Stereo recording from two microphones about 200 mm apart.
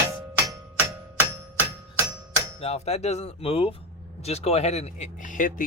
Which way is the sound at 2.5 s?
30° left (ahead or behind).